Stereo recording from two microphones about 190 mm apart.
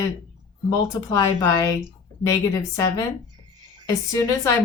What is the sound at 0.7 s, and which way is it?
Speech, 15° left (ahead or behind).